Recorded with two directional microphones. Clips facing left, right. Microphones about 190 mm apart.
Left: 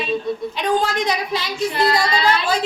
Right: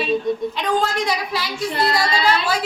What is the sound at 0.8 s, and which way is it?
Speech, 20° left (ahead or behind).